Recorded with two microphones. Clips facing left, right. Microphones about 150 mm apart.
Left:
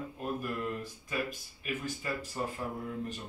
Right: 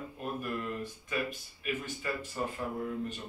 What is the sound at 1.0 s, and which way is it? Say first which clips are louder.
Speech: even; 40° left (ahead or behind).